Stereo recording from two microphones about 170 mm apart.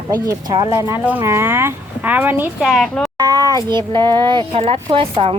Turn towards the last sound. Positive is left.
turn(degrees=-35)  # may be behind; listen again after turning